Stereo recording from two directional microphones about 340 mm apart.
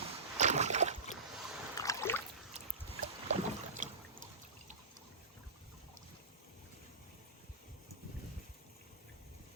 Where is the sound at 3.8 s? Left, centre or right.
Right.